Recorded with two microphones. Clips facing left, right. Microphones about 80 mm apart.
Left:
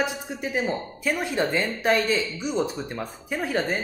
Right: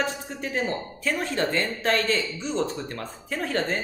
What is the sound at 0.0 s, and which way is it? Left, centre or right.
A man's voice, centre.